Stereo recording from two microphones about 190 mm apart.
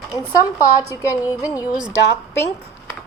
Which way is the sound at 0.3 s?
15° left (ahead or behind).